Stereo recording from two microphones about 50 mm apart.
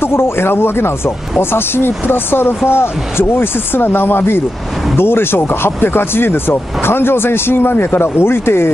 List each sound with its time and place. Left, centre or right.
0.0 s speech: left